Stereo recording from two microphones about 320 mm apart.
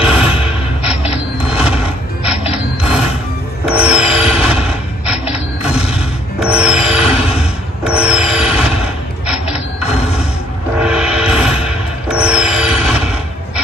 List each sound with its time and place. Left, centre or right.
0.0 s music: centre
2.5 s mechanisms: centre
3.6 s train: centre
5.6 s creak: centre
6.4 s train: centre
9.8 s mechanisms: centre
10.8 s music: centre